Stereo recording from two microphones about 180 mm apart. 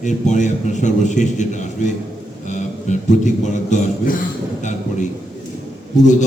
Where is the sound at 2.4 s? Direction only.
40° left (ahead or behind).